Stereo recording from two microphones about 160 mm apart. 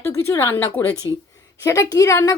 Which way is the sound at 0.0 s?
15° left (ahead or behind).